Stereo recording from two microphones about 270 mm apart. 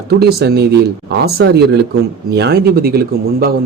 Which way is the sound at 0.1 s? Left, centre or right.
Right.